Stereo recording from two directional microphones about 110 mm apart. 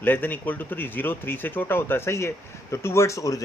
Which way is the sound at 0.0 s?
15° left (ahead or behind).